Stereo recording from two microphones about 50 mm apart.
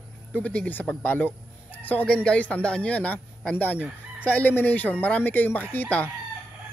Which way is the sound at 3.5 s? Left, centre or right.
Left.